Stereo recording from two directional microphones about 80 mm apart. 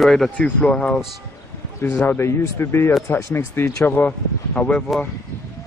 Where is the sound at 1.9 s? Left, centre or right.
Left.